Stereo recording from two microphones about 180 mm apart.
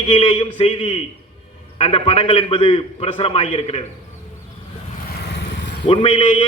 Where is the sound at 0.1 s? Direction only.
30° left (ahead or behind).